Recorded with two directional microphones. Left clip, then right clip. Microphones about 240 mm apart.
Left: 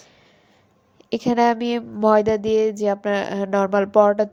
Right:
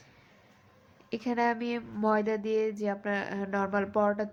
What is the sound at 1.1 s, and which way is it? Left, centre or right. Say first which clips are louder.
A woman's voice: left 11 dB; left.